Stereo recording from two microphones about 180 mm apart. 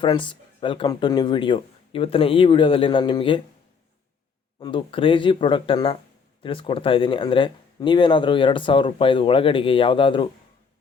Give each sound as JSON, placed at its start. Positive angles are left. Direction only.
{"t": 0.0, "sound": "speech", "side_deg": 25}
{"t": 4.6, "sound": "speech", "side_deg": 30}